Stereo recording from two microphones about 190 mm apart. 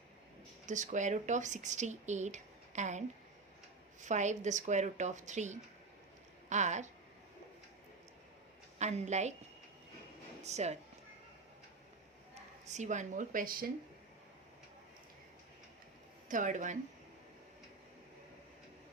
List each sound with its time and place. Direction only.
0.7 s speech: 40° right (ahead or behind)
4.0 s speech: 40° right (ahead or behind)
8.8 s speech: 35° right (ahead or behind)
10.4 s speech: 35° right (ahead or behind)
12.3 s speech: 40° right (ahead or behind)
16.3 s speech: 40° right (ahead or behind)